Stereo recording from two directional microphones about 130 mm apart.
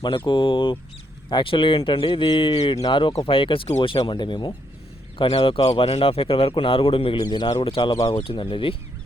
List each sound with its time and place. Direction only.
0.3 s a man's voice: 40° left (ahead or behind)